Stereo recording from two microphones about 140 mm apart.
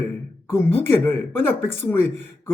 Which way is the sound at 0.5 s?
15° left (ahead or behind).